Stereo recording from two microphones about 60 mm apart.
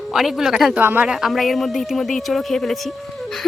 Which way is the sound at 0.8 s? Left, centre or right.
Right.